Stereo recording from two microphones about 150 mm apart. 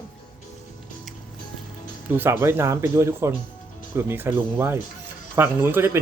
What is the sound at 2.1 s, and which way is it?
A man's voice, 15° right (ahead or behind).